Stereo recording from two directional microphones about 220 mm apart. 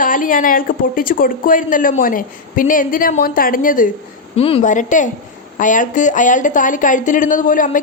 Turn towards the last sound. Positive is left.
turn(degrees=40)  # may be behind; listen again after turning